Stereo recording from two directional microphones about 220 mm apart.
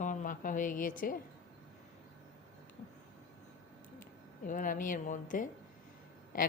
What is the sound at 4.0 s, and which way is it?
A woman's voice, 35° left (ahead or behind).